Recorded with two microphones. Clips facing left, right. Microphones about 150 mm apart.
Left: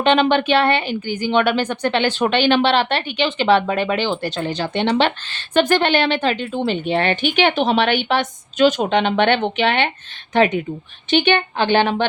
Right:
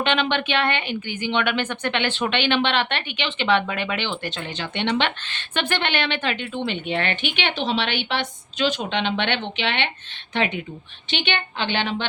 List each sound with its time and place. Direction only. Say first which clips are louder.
0.0 s a woman's voice: left 7 dB; 35° left (ahead or behind)